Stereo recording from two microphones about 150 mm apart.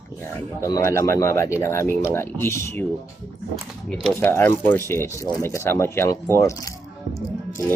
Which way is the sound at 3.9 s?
5° left (ahead or behind).